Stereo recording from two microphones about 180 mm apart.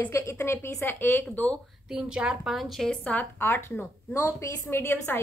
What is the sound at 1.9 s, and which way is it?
A woman's voice, 5° right (ahead or behind).